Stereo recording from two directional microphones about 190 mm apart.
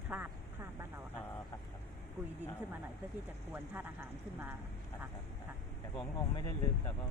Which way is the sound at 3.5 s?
10° right (ahead or behind).